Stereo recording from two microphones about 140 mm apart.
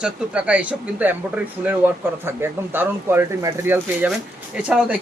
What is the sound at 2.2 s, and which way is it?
Speech, 15° right (ahead or behind).